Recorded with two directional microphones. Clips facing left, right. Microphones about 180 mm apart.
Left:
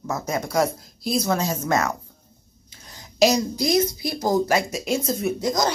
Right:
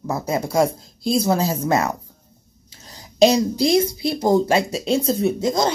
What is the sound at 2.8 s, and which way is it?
Speech, 30° right (ahead or behind).